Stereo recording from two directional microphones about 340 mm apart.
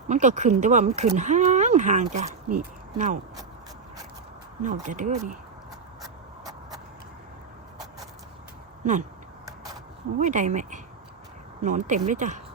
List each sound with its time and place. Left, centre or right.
0.1 s speech: right
4.6 s speech: right
8.8 s speech: right
10.2 s speech: right